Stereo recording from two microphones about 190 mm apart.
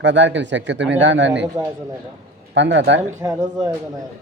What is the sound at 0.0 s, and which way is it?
A man's voice, 70° right (ahead or behind).